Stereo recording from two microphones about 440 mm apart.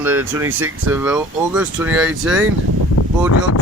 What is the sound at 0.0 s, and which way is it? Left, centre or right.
Speech, centre.